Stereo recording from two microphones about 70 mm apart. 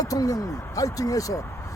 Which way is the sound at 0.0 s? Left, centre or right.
Left.